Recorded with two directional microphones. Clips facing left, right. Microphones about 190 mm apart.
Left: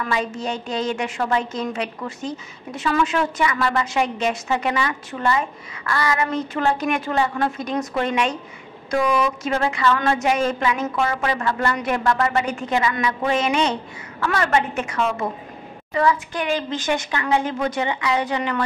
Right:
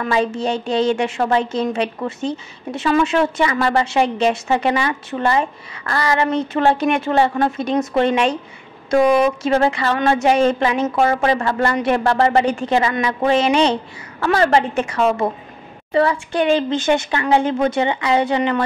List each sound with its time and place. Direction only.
0.0 s a woman's voice: 30° right (ahead or behind)